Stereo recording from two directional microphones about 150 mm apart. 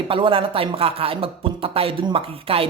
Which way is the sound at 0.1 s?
35° right (ahead or behind).